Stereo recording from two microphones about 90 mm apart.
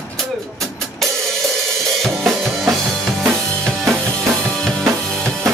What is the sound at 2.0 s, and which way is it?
Drum kit, centre (ahead or behind).